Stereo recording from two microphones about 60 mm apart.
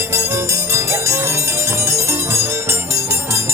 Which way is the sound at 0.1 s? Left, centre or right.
Right.